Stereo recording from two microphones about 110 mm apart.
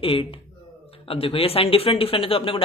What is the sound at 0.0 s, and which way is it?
A woman's voice, 55° left (ahead or behind).